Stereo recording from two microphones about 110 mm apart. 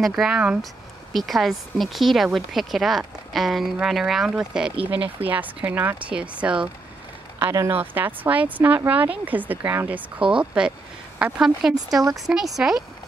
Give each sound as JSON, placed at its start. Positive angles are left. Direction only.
{"t": 0.0, "sound": "speech", "side_deg": -5}
{"t": 7.3, "sound": "speech", "side_deg": -25}